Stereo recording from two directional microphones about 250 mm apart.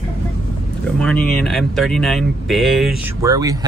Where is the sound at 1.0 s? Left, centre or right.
Centre.